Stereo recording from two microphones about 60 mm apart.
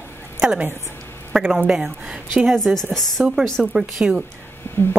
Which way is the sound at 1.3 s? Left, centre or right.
Centre.